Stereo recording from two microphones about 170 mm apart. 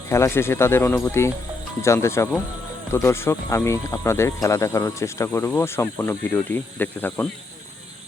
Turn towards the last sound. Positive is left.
turn(degrees=10)  # may be behind; listen again after turning